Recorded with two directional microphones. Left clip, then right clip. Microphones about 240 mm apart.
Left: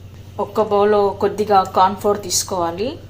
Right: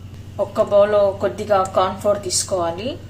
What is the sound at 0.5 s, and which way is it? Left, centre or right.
Speech, centre.